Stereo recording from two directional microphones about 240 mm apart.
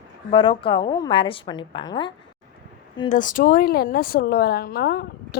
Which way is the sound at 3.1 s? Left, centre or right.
Left.